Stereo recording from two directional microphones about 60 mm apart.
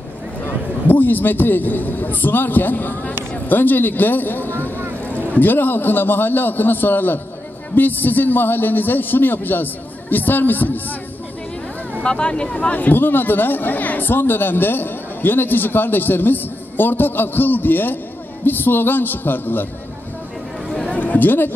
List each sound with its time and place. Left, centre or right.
0.4 s a man's voice: left
12.0 s speech: centre
12.7 s speech: left
21.0 s speech: left